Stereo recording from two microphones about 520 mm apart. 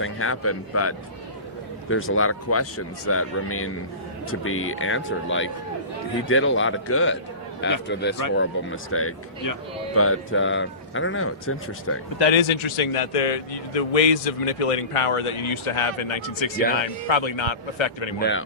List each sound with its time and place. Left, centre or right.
0.0 s speech: left
12.3 s a man's voice: left
18.2 s speech: left